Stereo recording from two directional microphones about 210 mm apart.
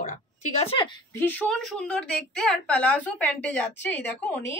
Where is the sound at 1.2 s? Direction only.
5° left (ahead or behind).